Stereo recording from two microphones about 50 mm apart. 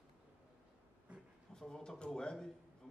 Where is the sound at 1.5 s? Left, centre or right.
Centre.